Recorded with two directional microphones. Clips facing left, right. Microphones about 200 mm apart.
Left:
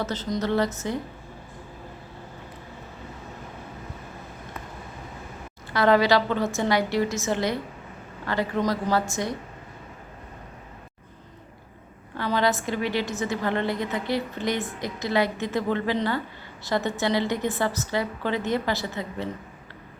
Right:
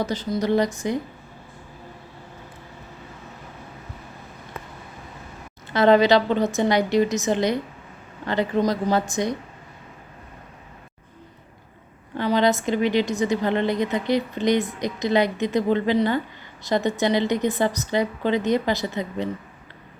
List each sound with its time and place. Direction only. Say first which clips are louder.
0.0 s a woman's voice: right 3 dB; 10° right (ahead or behind)
5.7 s a woman's voice: right 4 dB; 20° right (ahead or behind)
12.1 s a woman's voice: right 4 dB; 20° right (ahead or behind)